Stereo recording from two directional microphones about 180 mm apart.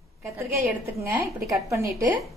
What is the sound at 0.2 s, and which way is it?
Speech, 15° right (ahead or behind).